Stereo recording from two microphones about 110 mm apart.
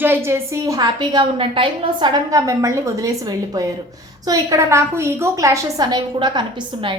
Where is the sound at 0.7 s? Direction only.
45° right (ahead or behind).